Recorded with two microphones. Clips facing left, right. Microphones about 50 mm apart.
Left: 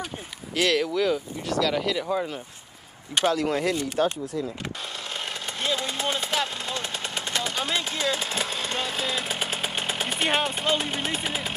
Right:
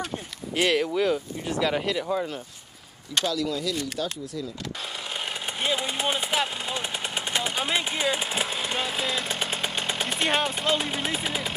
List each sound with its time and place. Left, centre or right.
0.6 s speech: centre
1.9 s speech: centre
3.3 s speech: left
5.6 s a sound: centre